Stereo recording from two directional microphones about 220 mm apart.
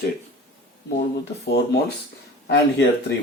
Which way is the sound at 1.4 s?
45° left (ahead or behind).